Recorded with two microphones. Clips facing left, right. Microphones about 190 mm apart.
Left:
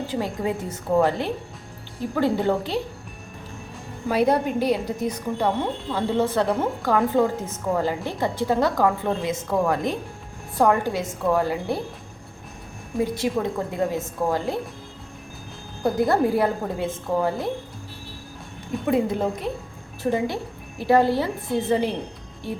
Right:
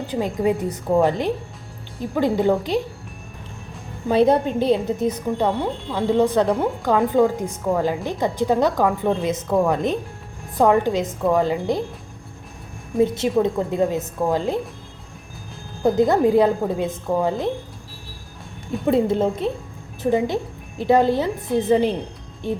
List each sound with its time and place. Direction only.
0.1 s a woman's voice: 20° right (ahead or behind)
4.1 s a woman's voice: 25° right (ahead or behind)
13.0 s a woman's voice: 20° right (ahead or behind)
15.8 s a woman's voice: 20° right (ahead or behind)
18.9 s a woman's voice: 25° right (ahead or behind)